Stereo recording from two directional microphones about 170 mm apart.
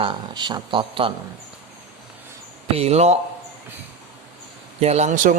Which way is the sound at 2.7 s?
40° right (ahead or behind).